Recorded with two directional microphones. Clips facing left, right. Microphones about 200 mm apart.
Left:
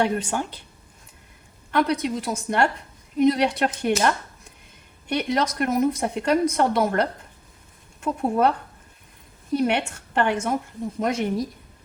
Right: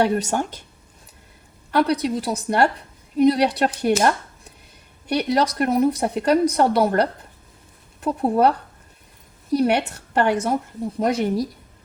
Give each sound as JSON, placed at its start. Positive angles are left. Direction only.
{"t": 0.0, "sound": "speech", "side_deg": -40}
{"t": 1.7, "sound": "speech", "side_deg": -35}
{"t": 5.0, "sound": "speech", "side_deg": -35}